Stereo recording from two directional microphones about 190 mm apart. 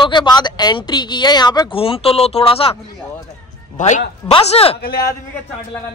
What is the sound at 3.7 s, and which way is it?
Speech, 40° left (ahead or behind).